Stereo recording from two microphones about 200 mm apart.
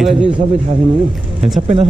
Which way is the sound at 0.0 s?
5° right (ahead or behind).